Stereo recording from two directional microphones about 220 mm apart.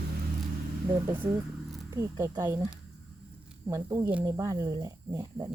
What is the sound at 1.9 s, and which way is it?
Speech, 15° right (ahead or behind).